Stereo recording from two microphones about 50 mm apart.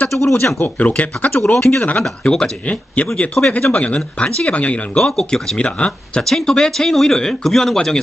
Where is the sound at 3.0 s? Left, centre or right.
Left.